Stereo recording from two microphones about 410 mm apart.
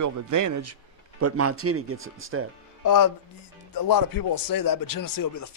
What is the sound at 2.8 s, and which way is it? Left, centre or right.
Speech, left.